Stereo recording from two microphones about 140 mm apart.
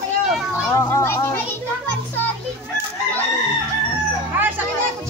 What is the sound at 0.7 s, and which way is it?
Speech, 20° left (ahead or behind).